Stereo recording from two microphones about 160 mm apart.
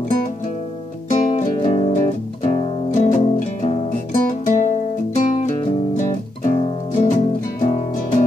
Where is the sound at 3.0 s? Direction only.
50° left (ahead or behind).